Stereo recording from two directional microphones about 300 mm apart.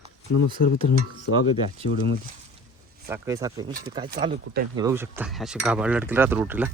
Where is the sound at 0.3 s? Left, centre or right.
Left.